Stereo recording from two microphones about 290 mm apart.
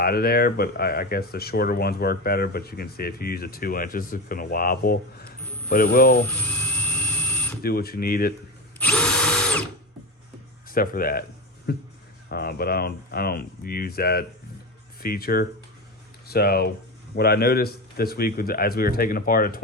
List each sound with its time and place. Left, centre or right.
0.0 s speech: left
6.2 s a sound: centre
7.6 s speech: left
8.8 s drill: centre
10.7 s speech: left